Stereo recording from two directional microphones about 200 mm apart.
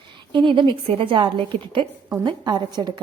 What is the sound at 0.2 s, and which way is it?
A woman's voice, 25° right (ahead or behind).